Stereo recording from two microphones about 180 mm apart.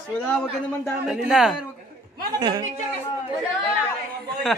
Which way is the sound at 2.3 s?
20° right (ahead or behind).